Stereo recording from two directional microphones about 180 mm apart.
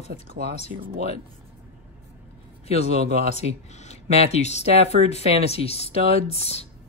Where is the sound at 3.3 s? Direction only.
40° left (ahead or behind).